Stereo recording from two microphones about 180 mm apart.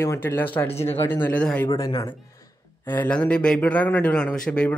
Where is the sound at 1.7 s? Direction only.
20° left (ahead or behind).